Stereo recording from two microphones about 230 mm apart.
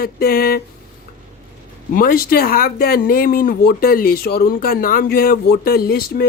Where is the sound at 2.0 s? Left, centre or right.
Left.